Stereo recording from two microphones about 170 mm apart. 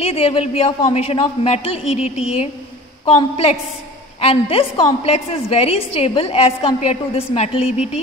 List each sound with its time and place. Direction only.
0.0 s a woman's voice: 35° left (ahead or behind)